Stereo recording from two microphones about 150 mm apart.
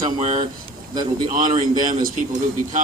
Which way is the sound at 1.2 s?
60° right (ahead or behind).